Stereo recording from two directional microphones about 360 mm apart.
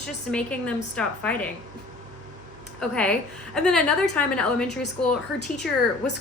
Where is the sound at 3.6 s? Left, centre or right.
Centre.